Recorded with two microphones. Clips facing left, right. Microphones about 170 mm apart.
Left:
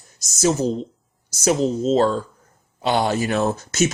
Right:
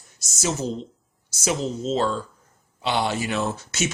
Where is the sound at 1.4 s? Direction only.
40° left (ahead or behind).